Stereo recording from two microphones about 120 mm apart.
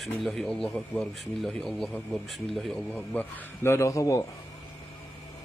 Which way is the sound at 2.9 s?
15° left (ahead or behind).